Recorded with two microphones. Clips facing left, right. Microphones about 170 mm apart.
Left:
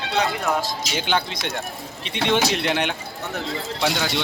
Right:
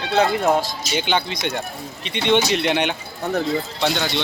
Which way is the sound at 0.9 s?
Centre (ahead or behind).